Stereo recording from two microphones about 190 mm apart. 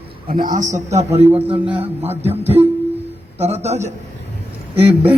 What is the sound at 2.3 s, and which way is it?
A man's voice, 30° right (ahead or behind).